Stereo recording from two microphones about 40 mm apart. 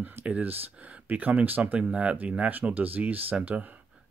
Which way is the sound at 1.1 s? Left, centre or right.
Right.